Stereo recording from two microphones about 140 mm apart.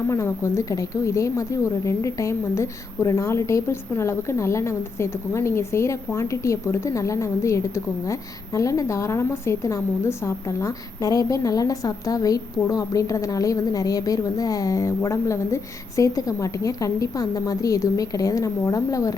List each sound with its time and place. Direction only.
0.1 s a woman's voice: 20° left (ahead or behind)